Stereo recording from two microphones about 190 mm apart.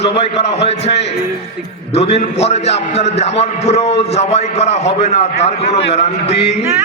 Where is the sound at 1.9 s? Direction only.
35° left (ahead or behind).